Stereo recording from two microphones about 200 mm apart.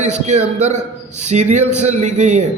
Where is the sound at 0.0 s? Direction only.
35° right (ahead or behind).